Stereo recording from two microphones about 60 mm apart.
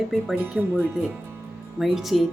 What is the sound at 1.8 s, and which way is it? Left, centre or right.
Speech, centre.